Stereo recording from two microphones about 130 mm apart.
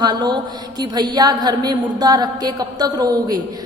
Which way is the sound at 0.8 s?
35° right (ahead or behind).